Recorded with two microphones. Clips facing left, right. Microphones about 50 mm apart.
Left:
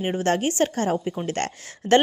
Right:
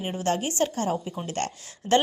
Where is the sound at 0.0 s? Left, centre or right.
Left.